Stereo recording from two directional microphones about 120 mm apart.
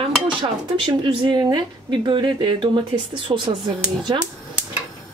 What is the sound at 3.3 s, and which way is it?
Speech, 30° right (ahead or behind).